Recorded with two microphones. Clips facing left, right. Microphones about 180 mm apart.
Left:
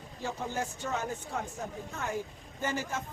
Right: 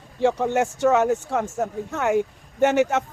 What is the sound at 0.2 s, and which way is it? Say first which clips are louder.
Speech: right 15 dB; 75° right (ahead or behind).